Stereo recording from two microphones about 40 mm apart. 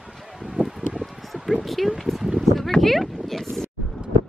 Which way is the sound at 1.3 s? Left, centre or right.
Centre.